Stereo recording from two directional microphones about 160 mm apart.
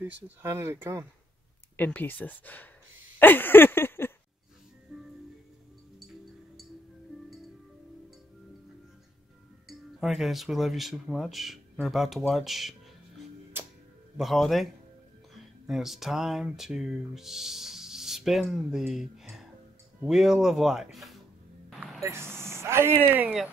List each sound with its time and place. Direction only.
0.4 s speech: 15° right (ahead or behind)
1.8 s speech: 10° left (ahead or behind)
3.2 s a sound: 10° left (ahead or behind)
4.9 s music: 5° right (ahead or behind)
9.7 s speech: centre (ahead or behind)
13.5 s music: 15° right (ahead or behind)
14.1 s speech: centre (ahead or behind)
21.7 s a sound: centre (ahead or behind)
22.0 s speech: 15° right (ahead or behind)